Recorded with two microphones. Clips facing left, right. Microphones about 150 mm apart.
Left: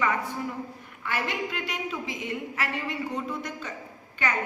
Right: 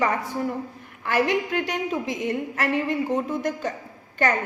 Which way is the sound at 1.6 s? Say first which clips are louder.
Right 6 dB; 45° right (ahead or behind).